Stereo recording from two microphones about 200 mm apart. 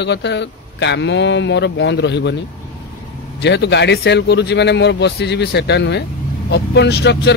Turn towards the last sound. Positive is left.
turn(degrees=55)  # may be behind; listen again after turning